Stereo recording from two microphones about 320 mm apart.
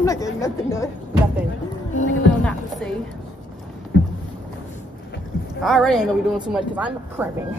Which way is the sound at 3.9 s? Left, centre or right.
Left.